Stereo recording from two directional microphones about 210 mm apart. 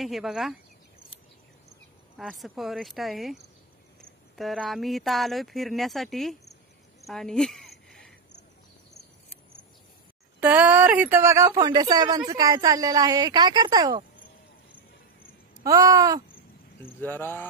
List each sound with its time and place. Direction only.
0.0 s speech: centre (ahead or behind)
2.1 s speech: centre (ahead or behind)
4.4 s speech: centre (ahead or behind)
7.1 s a sound: centre (ahead or behind)
10.4 s speech: 5° right (ahead or behind)
15.6 s speech: 15° right (ahead or behind)
17.0 s speech: 10° left (ahead or behind)